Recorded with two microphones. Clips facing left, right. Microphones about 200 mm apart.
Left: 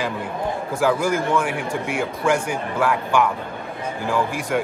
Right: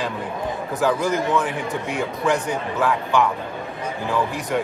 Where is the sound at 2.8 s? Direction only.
Centre (ahead or behind).